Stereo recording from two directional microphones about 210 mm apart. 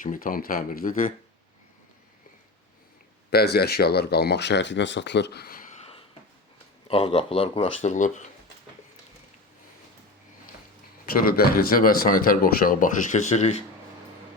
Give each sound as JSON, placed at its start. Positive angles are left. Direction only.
{"t": 0.0, "sound": "speech", "side_deg": 40}
{"t": 3.2, "sound": "speech", "side_deg": 50}
{"t": 6.8, "sound": "speech", "side_deg": 25}
{"t": 11.1, "sound": "speech", "side_deg": 45}